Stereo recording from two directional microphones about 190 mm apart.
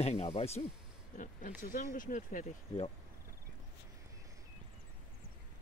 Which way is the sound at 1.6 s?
45° left (ahead or behind).